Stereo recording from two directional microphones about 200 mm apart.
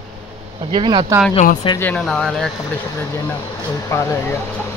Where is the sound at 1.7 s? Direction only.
5° left (ahead or behind).